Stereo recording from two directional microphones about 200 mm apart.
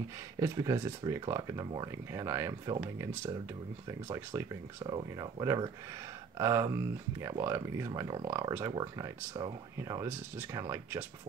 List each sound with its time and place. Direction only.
0.4 s speech: 15° right (ahead or behind)